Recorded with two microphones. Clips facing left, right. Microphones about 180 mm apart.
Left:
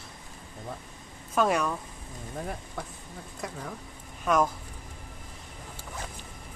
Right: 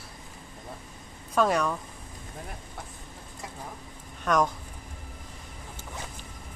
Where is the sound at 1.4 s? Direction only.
5° left (ahead or behind).